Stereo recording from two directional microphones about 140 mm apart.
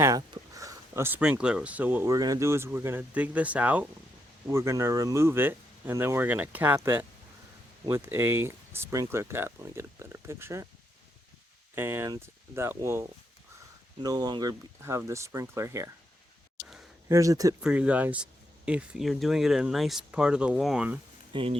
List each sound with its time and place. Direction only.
0.0 s speech: 25° right (ahead or behind)
2.1 s speech: 25° right (ahead or behind)
11.7 s speech: 15° right (ahead or behind)
17.1 s speech: 25° right (ahead or behind)
17.6 s speech: 5° right (ahead or behind)
21.3 s speech: 35° right (ahead or behind)